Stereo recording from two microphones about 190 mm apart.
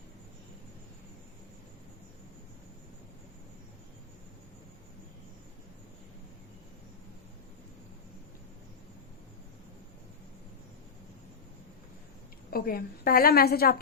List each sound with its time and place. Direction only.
12.5 s a woman's voice: 50° left (ahead or behind)